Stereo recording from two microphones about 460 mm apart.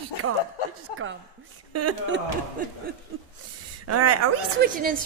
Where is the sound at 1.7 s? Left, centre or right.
Right.